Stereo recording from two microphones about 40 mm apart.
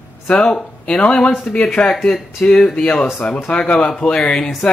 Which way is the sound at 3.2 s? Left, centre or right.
Left.